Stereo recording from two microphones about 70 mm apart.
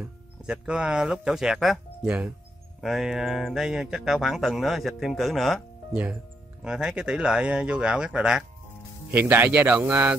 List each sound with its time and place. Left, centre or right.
0.0 s speech: centre
2.0 s speech: right
2.8 s speech: centre
6.6 s speech: centre
9.1 s speech: right